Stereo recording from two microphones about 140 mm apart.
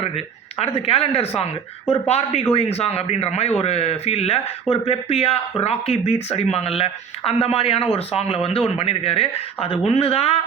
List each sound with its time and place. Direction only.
0.6 s a man's voice: 45° left (ahead or behind)